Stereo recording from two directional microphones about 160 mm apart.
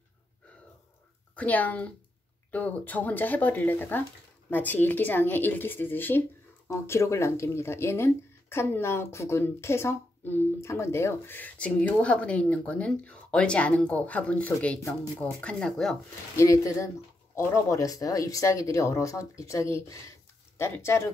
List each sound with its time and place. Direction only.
1.3 s speech: 10° left (ahead or behind)
16.3 s speech: 20° left (ahead or behind)